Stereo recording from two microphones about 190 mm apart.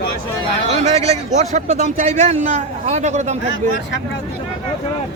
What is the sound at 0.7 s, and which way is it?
A man's voice, 35° right (ahead or behind).